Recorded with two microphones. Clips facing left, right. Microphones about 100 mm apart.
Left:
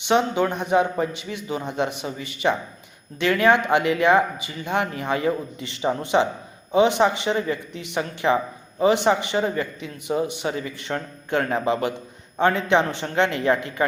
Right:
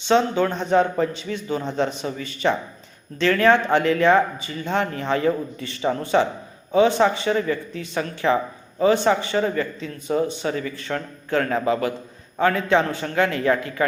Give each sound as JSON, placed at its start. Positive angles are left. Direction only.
{"t": 0.0, "sound": "a man's voice", "side_deg": 15}